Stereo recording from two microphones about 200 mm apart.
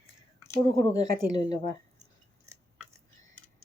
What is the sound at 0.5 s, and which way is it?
Speech, 20° left (ahead or behind).